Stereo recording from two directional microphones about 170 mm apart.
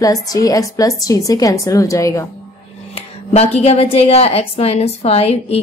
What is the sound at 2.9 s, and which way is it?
A woman's voice, 35° left (ahead or behind).